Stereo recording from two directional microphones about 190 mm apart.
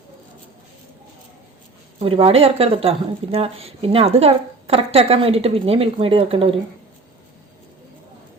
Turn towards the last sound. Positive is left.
turn(degrees=-30)  # may be behind; listen again after turning